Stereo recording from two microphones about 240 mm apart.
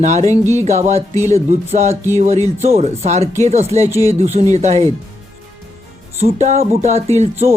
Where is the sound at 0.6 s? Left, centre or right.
Right.